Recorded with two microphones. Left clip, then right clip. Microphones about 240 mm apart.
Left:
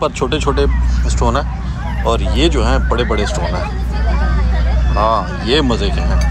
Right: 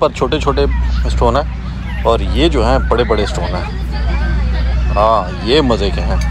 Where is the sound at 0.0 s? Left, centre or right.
Centre.